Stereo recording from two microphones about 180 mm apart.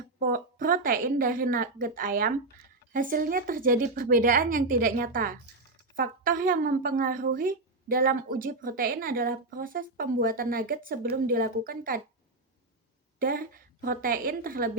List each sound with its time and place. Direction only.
0.2 s speech: 50° right (ahead or behind)
13.1 s speech: 50° right (ahead or behind)